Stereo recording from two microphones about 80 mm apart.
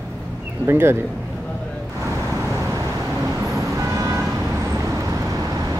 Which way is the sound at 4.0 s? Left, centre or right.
Right.